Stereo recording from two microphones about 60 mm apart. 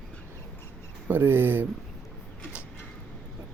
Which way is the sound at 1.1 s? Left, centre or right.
Right.